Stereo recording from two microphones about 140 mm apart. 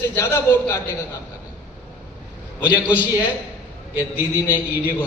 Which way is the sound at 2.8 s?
10° right (ahead or behind).